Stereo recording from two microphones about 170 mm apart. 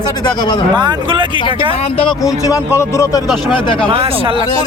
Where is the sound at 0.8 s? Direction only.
25° right (ahead or behind).